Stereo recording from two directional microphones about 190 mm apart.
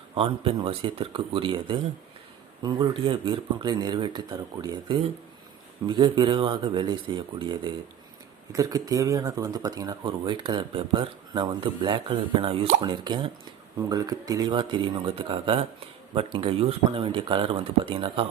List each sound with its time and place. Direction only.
0.1 s speech: 25° right (ahead or behind)